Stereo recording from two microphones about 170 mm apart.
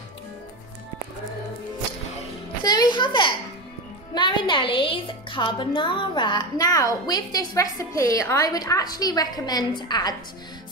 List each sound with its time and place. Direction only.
2.6 s a woman's voice: 25° left (ahead or behind)